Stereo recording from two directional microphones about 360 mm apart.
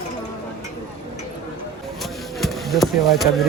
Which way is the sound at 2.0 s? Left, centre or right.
Centre.